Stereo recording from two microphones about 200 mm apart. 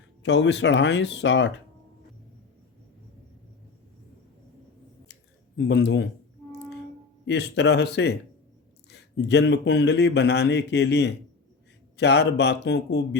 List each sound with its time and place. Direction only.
0.2 s speech: 60° left (ahead or behind)
5.5 s speech: 60° left (ahead or behind)
7.3 s speech: 60° left (ahead or behind)